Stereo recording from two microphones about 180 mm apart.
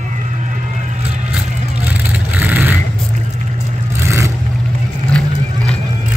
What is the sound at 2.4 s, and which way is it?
Vehicle, 10° right (ahead or behind).